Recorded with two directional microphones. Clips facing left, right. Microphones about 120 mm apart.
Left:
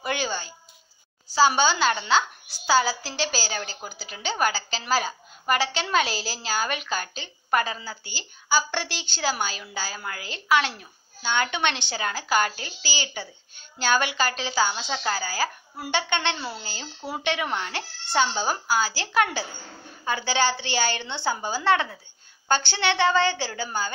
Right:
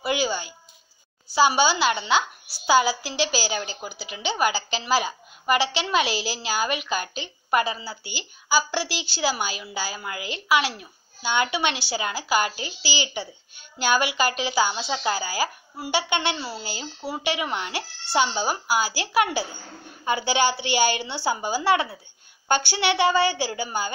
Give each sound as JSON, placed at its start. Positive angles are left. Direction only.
{"t": 0.0, "sound": "a sound", "side_deg": -10}
{"t": 1.3, "sound": "a woman's voice", "side_deg": -10}
{"t": 6.0, "sound": "a woman's voice", "side_deg": 40}
{"t": 6.4, "sound": "a woman's voice", "side_deg": -10}